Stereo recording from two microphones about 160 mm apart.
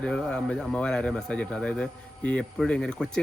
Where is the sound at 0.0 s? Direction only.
5° left (ahead or behind).